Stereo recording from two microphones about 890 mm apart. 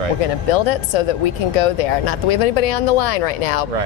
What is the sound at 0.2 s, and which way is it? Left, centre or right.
Speech, left.